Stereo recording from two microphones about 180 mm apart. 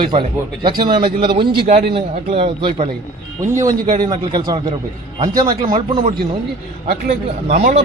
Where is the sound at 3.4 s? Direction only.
15° right (ahead or behind).